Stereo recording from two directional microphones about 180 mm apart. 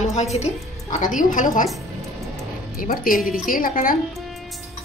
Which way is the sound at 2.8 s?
50° left (ahead or behind).